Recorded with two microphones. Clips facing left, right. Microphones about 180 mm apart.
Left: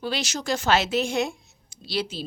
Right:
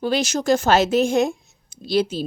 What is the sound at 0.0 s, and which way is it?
Speech, 50° right (ahead or behind).